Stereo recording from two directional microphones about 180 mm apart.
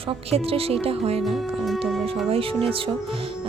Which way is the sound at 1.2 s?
Centre (ahead or behind).